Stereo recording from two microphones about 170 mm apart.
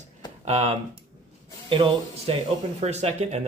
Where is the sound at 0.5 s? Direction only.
35° right (ahead or behind).